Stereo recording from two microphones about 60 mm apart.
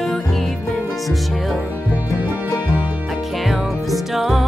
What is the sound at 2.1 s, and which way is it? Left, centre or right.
Music, left.